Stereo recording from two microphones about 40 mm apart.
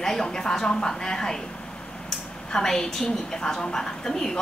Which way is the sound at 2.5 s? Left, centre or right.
Centre.